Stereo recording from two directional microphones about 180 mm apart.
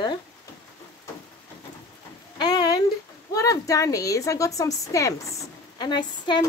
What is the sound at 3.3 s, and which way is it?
Speech, 20° left (ahead or behind).